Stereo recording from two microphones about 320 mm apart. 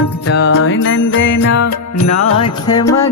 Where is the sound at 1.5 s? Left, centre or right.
Left.